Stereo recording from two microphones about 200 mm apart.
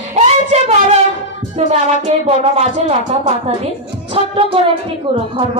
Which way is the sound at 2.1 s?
35° right (ahead or behind).